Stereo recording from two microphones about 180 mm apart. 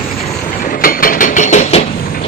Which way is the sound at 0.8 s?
50° left (ahead or behind).